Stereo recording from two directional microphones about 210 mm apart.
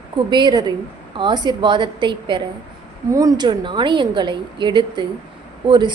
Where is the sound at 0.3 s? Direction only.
20° right (ahead or behind).